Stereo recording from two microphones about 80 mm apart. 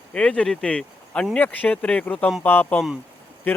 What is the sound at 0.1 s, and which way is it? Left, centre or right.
Speech, centre.